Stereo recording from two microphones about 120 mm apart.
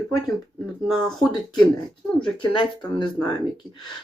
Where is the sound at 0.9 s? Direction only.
Centre (ahead or behind).